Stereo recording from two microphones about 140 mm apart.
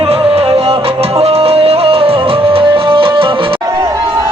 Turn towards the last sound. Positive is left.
turn(degrees=-40)  # may be behind; listen again after turning